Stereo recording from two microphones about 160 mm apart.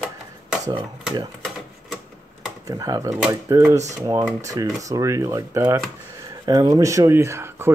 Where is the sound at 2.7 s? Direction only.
25° right (ahead or behind).